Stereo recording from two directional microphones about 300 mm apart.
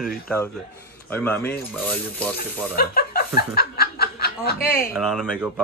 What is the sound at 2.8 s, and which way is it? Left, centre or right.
Chuckle, left.